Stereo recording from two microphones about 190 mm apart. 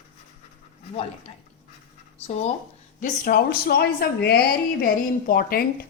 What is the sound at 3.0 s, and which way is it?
A woman's voice, 50° left (ahead or behind).